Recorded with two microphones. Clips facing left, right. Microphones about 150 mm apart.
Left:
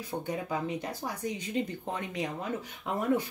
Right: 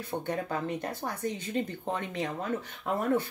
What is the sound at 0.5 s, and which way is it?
Speech, 10° left (ahead or behind).